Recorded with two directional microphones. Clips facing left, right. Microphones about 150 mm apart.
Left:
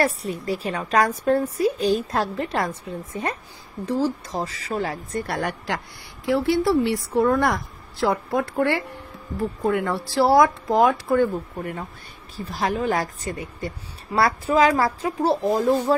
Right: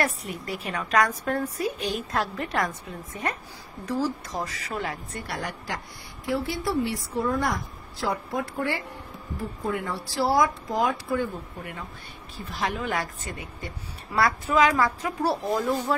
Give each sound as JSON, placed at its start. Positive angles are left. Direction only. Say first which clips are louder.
{"t": 0.0, "sound": "a woman's voice", "louder": "left 5 dB", "side_deg": 30}
{"t": 5.2, "sound": "speech", "louder": "left 5 dB", "side_deg": 60}
{"t": 6.2, "sound": "a woman's voice", "louder": "left 8 dB", "side_deg": 75}
{"t": 12.4, "sound": "a woman's voice", "louder": "left 5 dB", "side_deg": 40}